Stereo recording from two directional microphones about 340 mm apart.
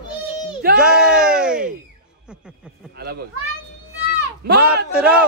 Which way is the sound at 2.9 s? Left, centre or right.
Right.